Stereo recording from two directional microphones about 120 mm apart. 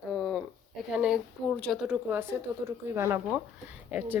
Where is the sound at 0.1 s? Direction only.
Centre (ahead or behind).